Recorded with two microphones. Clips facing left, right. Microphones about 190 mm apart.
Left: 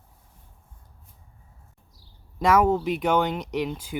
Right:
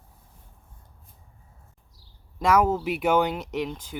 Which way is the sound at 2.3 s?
Centre (ahead or behind).